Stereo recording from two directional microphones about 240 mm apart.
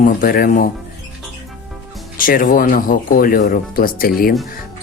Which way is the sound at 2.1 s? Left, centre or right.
Left.